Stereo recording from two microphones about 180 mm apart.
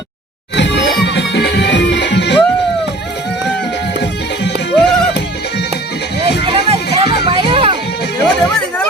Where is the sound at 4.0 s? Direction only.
70° left (ahead or behind).